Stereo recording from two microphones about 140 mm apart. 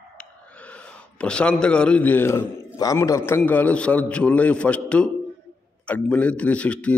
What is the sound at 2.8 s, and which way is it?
A man's voice, 25° left (ahead or behind).